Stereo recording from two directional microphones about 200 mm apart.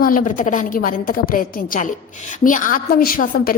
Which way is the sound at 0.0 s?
40° left (ahead or behind).